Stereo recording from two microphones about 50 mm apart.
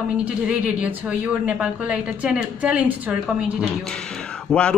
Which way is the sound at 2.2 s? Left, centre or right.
Right.